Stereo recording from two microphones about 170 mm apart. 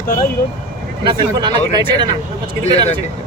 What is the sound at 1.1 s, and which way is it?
Speech, 30° right (ahead or behind).